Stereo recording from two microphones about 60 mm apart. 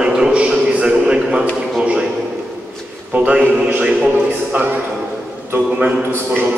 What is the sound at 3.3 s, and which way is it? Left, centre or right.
A man's voice, centre.